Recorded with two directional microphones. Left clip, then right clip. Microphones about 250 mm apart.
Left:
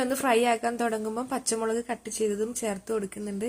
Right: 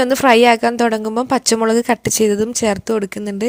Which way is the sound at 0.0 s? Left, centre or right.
Right.